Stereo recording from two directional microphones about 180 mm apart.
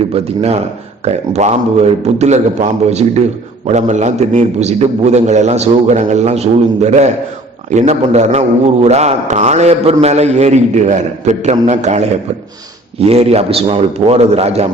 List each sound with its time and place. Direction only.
0.1 s a man's voice: 35° right (ahead or behind)